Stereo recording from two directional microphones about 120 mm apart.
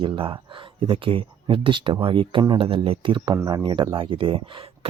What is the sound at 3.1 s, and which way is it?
Speech, 30° right (ahead or behind).